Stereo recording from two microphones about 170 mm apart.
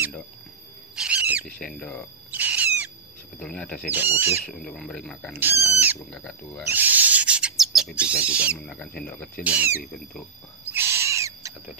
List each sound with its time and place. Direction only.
0.9 s bird: 5° right (ahead or behind)
1.4 s speech: 5° left (ahead or behind)
2.3 s owl: 10° right (ahead or behind)
3.3 s speech: 10° left (ahead or behind)
3.9 s speech: 10° right (ahead or behind)
4.5 s speech: 5° left (ahead or behind)
5.3 s speech: 10° right (ahead or behind)
6.1 s speech: 5° left (ahead or behind)
6.7 s owl: 10° right (ahead or behind)
8.5 s speech: 5° left (ahead or behind)
9.4 s speech: 10° right (ahead or behind)
10.6 s owl: 10° right (ahead or behind)